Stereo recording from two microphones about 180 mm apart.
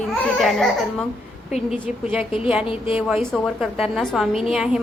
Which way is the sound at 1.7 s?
5° right (ahead or behind).